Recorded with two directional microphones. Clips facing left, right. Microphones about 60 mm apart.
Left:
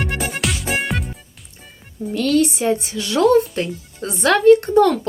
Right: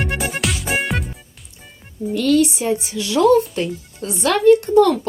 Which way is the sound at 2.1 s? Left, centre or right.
Left.